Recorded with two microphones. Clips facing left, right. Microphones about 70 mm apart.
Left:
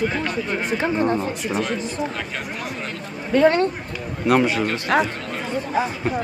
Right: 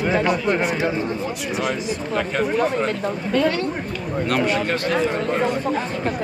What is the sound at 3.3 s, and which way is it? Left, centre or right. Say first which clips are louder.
Speech: left 5 dB; left.